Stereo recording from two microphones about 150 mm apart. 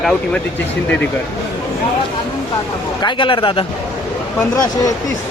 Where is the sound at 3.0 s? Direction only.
35° left (ahead or behind).